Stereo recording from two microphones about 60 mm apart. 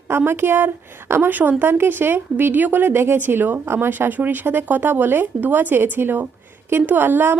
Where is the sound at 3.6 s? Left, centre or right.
Right.